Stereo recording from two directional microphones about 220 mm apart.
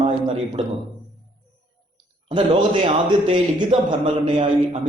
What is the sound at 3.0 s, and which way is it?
Speech, 20° right (ahead or behind).